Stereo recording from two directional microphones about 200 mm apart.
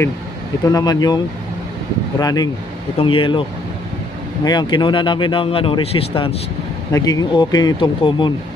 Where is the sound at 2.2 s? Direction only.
20° left (ahead or behind).